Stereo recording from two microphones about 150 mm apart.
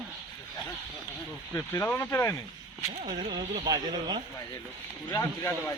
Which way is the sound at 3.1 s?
30° right (ahead or behind).